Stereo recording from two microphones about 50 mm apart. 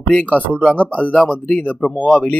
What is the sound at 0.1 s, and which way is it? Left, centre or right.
Speech, left.